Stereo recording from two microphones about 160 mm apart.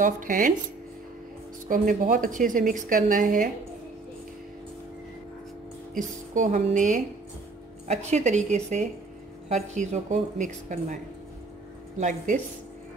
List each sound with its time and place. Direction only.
0.0 s a woman's voice: 55° right (ahead or behind)
1.7 s a woman's voice: 55° right (ahead or behind)
5.9 s speech: 50° right (ahead or behind)
12.0 s speech: 50° right (ahead or behind)